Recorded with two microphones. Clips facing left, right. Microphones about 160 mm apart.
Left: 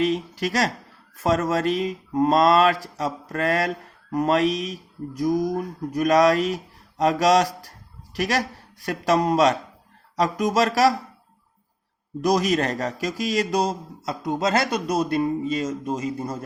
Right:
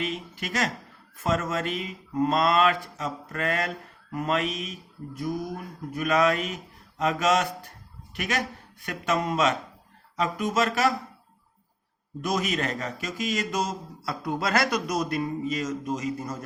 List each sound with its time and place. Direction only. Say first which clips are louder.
0.0 s mantra: left 9 dB; 40° left (ahead or behind)
12.2 s mantra: left 7 dB; 40° left (ahead or behind)
14.0 s speech: left 5 dB; 20° left (ahead or behind)